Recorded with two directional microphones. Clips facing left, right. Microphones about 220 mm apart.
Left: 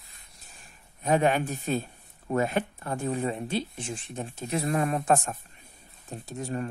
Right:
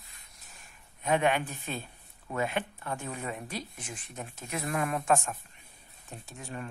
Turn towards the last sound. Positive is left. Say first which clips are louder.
# left 8 dB
turn(degrees=40)  # may be behind; listen again after turning